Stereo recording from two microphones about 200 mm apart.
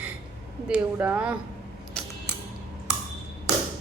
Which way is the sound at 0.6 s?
5° right (ahead or behind).